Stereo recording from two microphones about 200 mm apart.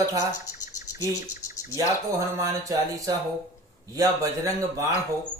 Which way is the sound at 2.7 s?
15° right (ahead or behind).